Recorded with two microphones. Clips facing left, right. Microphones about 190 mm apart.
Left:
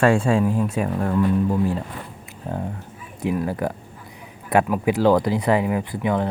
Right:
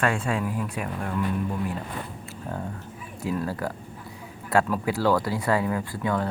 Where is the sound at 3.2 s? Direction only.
15° left (ahead or behind).